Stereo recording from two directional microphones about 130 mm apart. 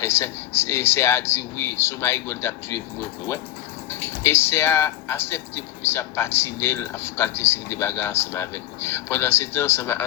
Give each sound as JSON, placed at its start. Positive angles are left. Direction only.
{"t": 0.0, "sound": "speech", "side_deg": 20}
{"t": 3.8, "sound": "speech", "side_deg": 20}